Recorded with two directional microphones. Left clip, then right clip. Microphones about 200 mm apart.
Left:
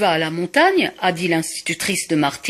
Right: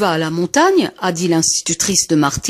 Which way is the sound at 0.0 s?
45° right (ahead or behind).